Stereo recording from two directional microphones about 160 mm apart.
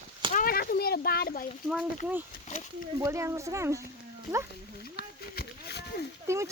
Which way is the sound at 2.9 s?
20° right (ahead or behind).